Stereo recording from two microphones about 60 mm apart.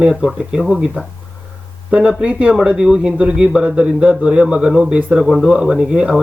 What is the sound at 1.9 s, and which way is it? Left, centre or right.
A man's voice, centre.